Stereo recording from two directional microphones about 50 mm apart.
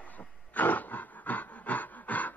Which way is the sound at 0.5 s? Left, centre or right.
Left.